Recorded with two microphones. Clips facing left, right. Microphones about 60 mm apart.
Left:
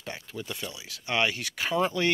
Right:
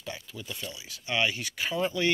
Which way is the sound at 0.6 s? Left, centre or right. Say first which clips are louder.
Left 2 dB; left.